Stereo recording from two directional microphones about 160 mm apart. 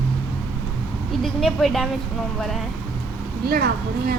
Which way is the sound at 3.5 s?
70° right (ahead or behind).